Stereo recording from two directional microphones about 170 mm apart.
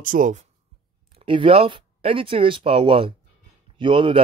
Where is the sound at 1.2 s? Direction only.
30° right (ahead or behind).